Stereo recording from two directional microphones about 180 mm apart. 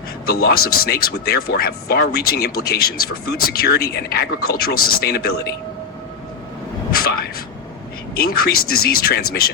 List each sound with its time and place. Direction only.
0.3 s speech: 60° left (ahead or behind)
6.9 s speech: 55° left (ahead or behind)